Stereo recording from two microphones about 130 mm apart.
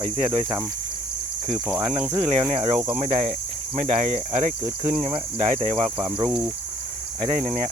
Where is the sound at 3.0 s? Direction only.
55° right (ahead or behind).